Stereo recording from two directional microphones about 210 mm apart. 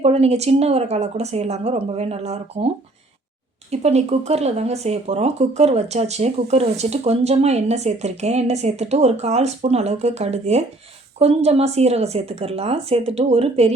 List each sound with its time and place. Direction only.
0.0 s speech: 30° right (ahead or behind)
3.7 s speech: 30° right (ahead or behind)